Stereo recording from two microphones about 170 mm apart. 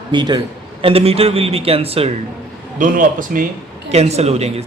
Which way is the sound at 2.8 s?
55° right (ahead or behind).